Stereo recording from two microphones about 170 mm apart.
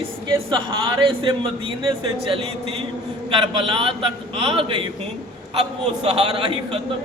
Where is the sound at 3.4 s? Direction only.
30° right (ahead or behind).